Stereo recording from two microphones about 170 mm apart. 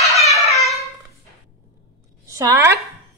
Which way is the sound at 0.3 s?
20° left (ahead or behind).